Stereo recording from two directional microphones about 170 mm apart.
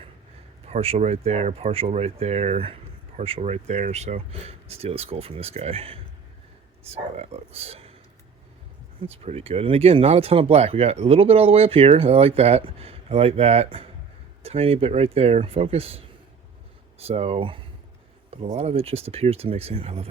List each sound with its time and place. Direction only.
0.7 s speech: 40° right (ahead or behind)
9.0 s speech: 35° right (ahead or behind)